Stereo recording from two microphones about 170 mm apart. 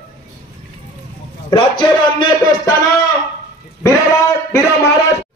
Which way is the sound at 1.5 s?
25° left (ahead or behind).